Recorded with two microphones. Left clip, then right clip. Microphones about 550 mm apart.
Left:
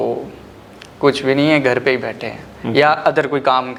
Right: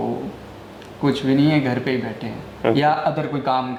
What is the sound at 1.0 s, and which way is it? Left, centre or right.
A man's voice, left.